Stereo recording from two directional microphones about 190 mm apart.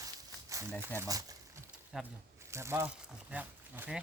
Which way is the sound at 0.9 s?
20° right (ahead or behind).